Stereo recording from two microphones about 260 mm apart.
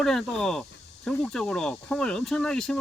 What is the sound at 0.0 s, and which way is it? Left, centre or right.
Speech, centre.